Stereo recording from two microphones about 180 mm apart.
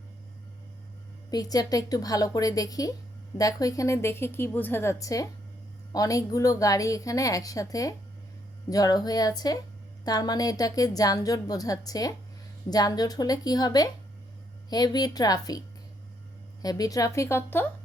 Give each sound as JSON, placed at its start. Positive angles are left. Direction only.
{"t": 1.3, "sound": "a woman's voice", "side_deg": 20}
{"t": 16.6, "sound": "a woman's voice", "side_deg": 20}